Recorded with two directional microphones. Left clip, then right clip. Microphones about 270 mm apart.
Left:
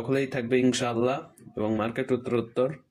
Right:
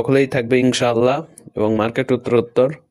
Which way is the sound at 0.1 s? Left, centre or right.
Right.